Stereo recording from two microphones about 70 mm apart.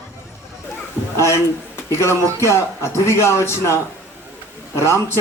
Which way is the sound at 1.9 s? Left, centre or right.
Left.